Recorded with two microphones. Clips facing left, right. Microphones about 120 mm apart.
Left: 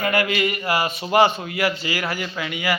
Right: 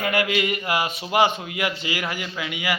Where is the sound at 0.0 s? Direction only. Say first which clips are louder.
Left 2 dB; 15° right (ahead or behind).